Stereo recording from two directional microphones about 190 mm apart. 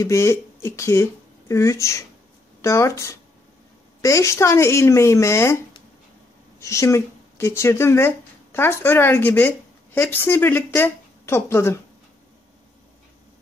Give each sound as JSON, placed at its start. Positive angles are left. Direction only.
{"t": 0.0, "sound": "speech", "side_deg": 15}
{"t": 6.6, "sound": "speech", "side_deg": 15}